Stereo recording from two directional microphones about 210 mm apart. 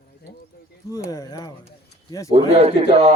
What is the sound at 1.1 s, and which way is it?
Speech, 20° left (ahead or behind).